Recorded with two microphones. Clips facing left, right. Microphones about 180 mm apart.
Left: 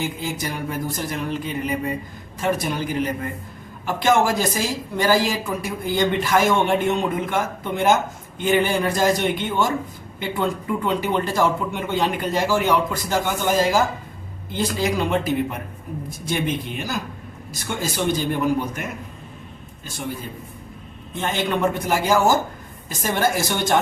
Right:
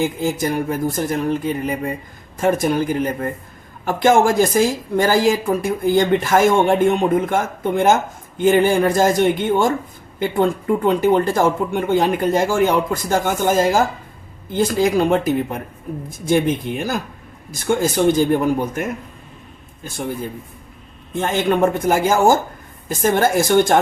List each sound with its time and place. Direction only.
0.0 s speech: 50° right (ahead or behind)
21.2 s speech: 50° right (ahead or behind)